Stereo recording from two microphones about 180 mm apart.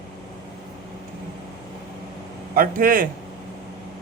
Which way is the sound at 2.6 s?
50° right (ahead or behind).